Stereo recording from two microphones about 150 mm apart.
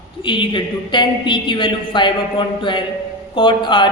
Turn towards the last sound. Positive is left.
turn(degrees=30)  # may be behind; listen again after turning